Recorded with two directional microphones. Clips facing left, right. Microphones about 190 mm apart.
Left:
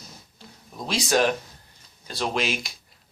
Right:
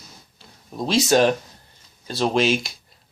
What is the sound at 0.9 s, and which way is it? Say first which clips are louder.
Speech: right 5 dB; 25° right (ahead or behind).